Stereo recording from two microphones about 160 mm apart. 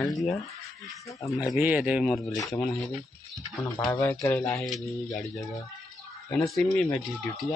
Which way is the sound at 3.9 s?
15° left (ahead or behind).